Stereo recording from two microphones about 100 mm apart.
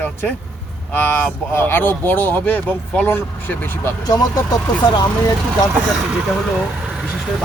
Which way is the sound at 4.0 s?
40° left (ahead or behind).